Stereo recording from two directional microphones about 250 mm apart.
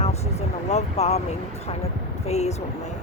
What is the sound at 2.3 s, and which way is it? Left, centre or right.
Speech, left.